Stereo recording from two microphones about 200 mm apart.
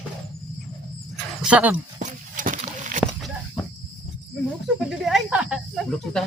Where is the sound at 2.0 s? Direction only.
40° right (ahead or behind).